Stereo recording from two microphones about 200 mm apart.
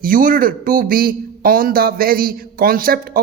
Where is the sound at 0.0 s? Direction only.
45° right (ahead or behind).